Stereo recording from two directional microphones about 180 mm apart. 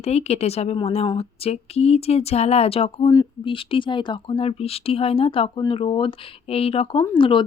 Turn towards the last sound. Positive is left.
turn(degrees=30)  # may be behind; listen again after turning